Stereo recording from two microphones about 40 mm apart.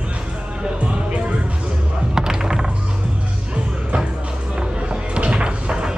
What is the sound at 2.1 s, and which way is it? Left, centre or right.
Music, centre.